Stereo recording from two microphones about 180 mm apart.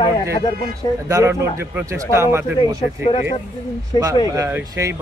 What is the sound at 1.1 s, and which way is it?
Speech, 15° right (ahead or behind).